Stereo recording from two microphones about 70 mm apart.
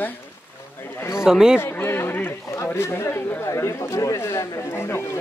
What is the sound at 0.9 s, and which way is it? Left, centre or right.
Speech, left.